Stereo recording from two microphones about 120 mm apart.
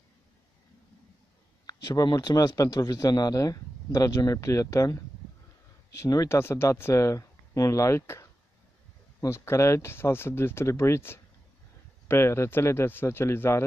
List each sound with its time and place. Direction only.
1.7 s speech: 35° left (ahead or behind)